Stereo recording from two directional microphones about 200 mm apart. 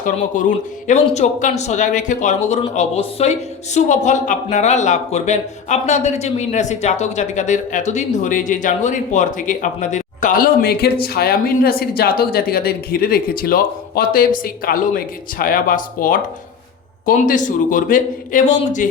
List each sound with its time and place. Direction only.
0.4 s speech: 40° left (ahead or behind)